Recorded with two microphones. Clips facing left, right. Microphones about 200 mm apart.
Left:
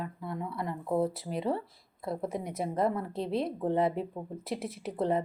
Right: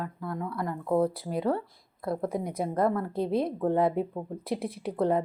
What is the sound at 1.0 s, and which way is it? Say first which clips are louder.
Speech: right 3 dB; centre (ahead or behind).